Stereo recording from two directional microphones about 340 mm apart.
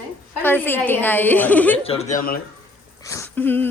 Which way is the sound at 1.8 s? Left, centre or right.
Centre.